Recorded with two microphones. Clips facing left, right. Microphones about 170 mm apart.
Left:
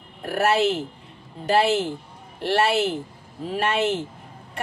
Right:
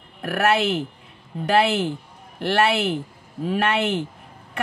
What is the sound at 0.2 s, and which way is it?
A woman's voice, 65° right (ahead or behind).